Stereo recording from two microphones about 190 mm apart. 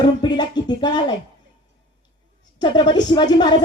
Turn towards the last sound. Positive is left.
turn(degrees=25)  # may be behind; listen again after turning